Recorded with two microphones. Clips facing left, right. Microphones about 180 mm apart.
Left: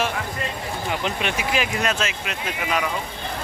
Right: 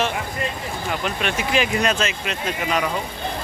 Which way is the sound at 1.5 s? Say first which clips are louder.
Right 5 dB; 5° left (ahead or behind).